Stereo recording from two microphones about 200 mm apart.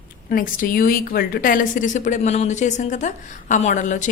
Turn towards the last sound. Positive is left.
turn(degrees=40)  # may be behind; listen again after turning